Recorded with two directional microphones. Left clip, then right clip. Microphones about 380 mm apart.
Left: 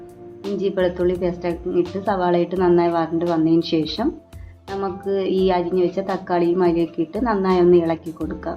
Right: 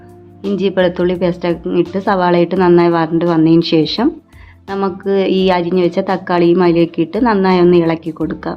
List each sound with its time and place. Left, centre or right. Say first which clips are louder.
0.5 s a woman's voice: right 7 dB; right